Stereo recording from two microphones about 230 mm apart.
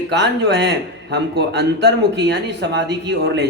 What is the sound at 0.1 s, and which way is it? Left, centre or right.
Speech, right.